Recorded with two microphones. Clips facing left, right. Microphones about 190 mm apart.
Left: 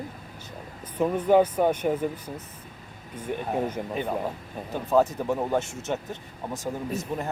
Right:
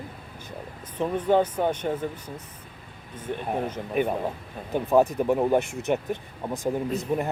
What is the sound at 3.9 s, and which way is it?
Speech, 20° right (ahead or behind).